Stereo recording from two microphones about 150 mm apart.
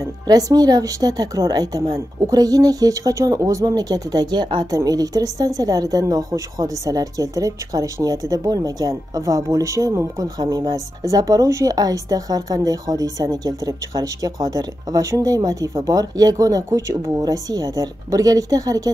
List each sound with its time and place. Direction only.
0.3 s a woman's voice: 25° right (ahead or behind)